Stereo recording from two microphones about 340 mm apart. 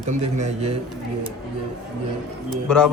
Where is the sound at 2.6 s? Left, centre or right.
Centre.